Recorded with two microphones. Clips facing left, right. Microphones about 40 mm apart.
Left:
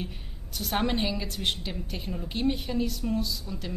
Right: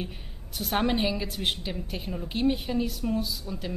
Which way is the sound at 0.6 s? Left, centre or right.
Centre.